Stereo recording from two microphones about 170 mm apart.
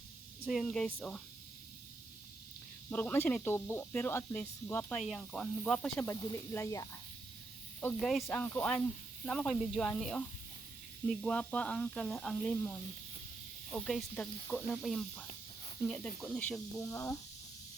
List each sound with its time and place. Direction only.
0.4 s speech: 5° left (ahead or behind)
2.9 s speech: 10° left (ahead or behind)
6.1 s speech: 20° left (ahead or behind); by 12.5 s centre (ahead or behind)
13.7 s speech: 5° left (ahead or behind)
16.7 s speech: 20° left (ahead or behind)